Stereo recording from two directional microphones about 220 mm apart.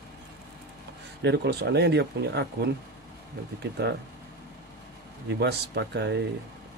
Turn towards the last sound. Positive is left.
turn(degrees=-50)  # may be behind; listen again after turning